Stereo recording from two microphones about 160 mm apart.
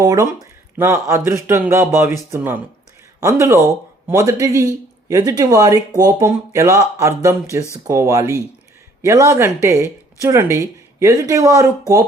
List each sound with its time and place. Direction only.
0.0 s speech: 25° right (ahead or behind)